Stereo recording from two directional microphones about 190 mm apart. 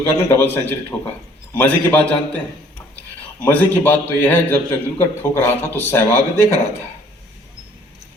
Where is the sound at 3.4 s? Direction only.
10° left (ahead or behind).